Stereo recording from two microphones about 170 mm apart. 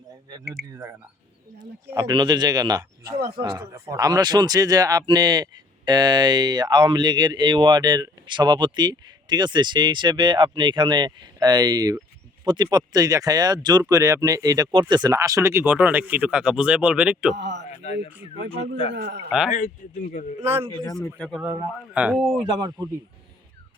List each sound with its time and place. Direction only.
0.7 s speech: 15° right (ahead or behind)
17.3 s a man's voice: 90° right
17.8 s speech: 40° left (ahead or behind)
18.9 s a man's voice: 90° right
19.5 s speech: 45° left (ahead or behind)
21.2 s speech: centre (ahead or behind)
22.5 s speech: 25° right (ahead or behind)